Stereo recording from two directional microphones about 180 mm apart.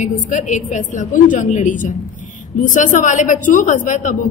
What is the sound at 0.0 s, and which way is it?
A woman's voice, 45° left (ahead or behind).